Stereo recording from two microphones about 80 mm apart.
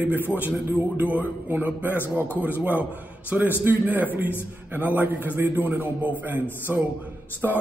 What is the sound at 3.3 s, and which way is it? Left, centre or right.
A man's voice, right.